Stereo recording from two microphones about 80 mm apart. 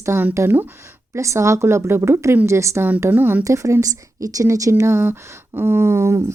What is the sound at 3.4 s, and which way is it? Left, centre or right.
Speech, right.